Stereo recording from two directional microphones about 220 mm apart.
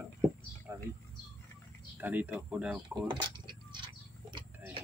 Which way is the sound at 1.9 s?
10° right (ahead or behind).